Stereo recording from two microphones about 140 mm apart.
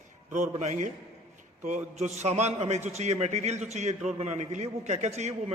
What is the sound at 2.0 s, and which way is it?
A man's voice, 55° right (ahead or behind).